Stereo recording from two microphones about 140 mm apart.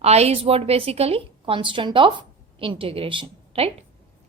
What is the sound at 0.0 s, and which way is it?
Speech, 50° right (ahead or behind).